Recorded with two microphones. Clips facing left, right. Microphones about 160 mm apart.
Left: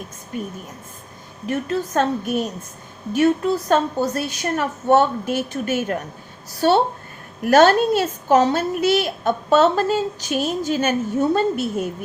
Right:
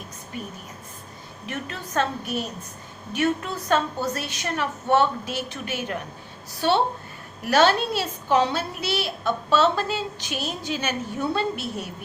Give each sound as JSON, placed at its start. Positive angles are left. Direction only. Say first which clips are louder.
{"t": 1.5, "sound": "a woman's voice", "louder": "left 11 dB", "side_deg": 40}